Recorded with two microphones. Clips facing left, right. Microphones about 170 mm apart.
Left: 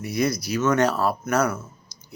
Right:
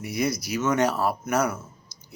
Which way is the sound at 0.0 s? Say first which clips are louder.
Left 3 dB; 20° right (ahead or behind).